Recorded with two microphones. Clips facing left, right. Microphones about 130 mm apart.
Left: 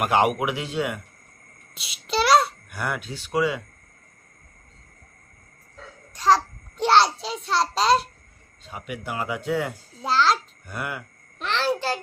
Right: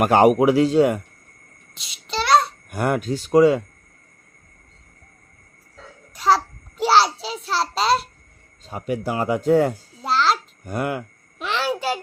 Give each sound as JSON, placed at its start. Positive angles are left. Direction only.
{"t": 0.0, "sound": "speech", "side_deg": -40}
{"t": 1.7, "sound": "babbling", "side_deg": 5}
{"t": 2.6, "sound": "speech", "side_deg": -45}
{"t": 6.1, "sound": "babbling", "side_deg": -5}
{"t": 8.6, "sound": "speech", "side_deg": -40}
{"t": 10.0, "sound": "a sound", "side_deg": 0}
{"t": 10.7, "sound": "speech", "side_deg": -45}
{"t": 11.3, "sound": "a sound", "side_deg": -5}